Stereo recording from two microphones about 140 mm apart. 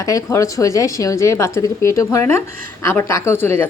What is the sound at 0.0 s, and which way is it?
A woman's voice, 25° left (ahead or behind).